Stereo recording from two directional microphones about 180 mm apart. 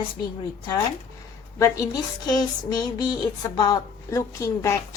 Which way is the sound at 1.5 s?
15° left (ahead or behind).